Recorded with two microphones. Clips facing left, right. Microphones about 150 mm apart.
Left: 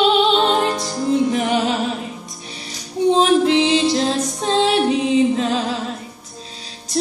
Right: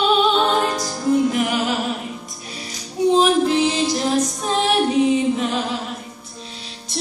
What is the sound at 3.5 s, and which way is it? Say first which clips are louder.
Music: left 3 dB; 25° left (ahead or behind).